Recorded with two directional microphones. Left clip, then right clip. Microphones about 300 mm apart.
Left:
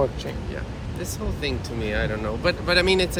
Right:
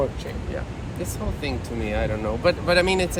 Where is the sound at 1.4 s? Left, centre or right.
Centre.